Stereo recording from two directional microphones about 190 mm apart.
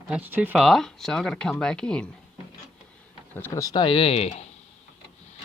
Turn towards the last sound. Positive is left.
turn(degrees=35)  # may be behind; listen again after turning